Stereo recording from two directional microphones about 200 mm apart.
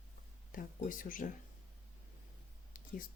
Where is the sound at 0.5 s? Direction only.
40° left (ahead or behind).